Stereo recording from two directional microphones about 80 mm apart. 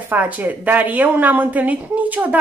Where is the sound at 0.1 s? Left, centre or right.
Right.